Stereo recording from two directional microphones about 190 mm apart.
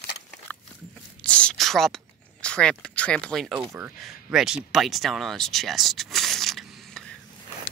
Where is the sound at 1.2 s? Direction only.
5° left (ahead or behind).